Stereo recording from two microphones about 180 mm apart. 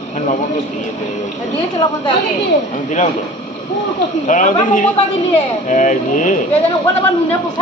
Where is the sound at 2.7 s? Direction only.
45° left (ahead or behind).